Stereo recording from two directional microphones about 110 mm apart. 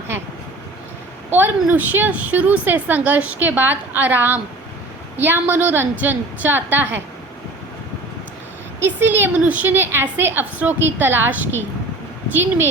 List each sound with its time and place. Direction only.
1.3 s a woman's voice: 15° right (ahead or behind)
8.8 s a woman's voice: 15° right (ahead or behind)